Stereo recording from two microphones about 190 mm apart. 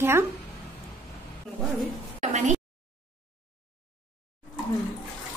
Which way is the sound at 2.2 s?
40° right (ahead or behind).